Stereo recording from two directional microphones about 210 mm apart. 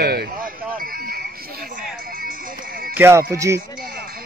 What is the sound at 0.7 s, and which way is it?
Speech, 45° right (ahead or behind).